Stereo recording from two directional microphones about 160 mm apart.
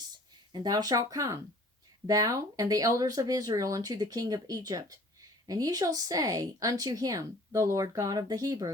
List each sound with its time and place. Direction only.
0.5 s speech: 25° right (ahead or behind)